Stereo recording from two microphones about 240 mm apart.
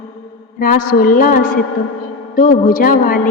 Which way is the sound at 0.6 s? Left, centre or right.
Left.